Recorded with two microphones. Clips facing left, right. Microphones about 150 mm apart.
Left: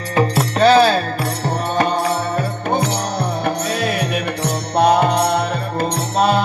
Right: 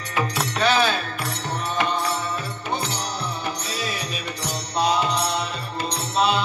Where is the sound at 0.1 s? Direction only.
40° left (ahead or behind).